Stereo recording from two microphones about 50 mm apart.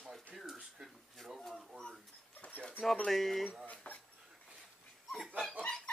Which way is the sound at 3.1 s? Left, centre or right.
Centre.